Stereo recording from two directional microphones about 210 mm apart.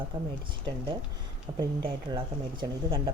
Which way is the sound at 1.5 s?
20° right (ahead or behind).